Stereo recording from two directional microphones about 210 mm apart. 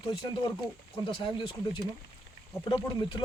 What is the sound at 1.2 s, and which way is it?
Speech, 25° left (ahead or behind).